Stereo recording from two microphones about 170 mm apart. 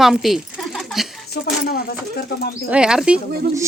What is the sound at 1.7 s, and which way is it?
Speech, 65° left (ahead or behind).